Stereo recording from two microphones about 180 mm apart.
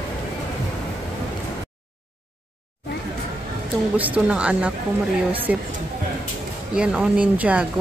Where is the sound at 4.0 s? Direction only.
5° right (ahead or behind).